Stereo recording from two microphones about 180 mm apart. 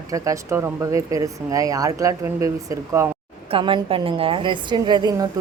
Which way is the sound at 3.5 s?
30° right (ahead or behind).